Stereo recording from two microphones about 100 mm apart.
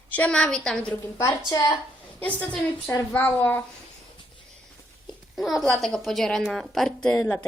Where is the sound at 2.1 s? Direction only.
15° left (ahead or behind).